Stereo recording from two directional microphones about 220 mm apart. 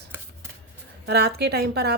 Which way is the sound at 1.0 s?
45° right (ahead or behind).